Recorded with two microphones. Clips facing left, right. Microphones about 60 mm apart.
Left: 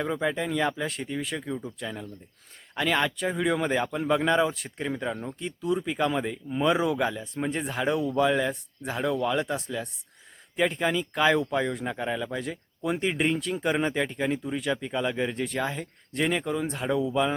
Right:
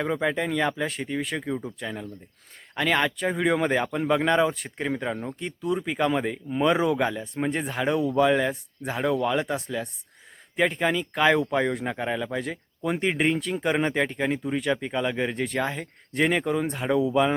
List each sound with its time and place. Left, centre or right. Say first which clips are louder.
0.0 s speech: right 2 dB; centre
1.5 s speech: right 3 dB; centre
1.8 s speech: right 2 dB; centre